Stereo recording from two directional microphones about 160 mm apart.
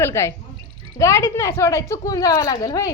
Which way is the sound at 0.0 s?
15° left (ahead or behind).